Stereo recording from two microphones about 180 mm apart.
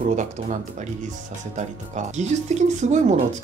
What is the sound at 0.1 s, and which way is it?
Speech, 40° right (ahead or behind).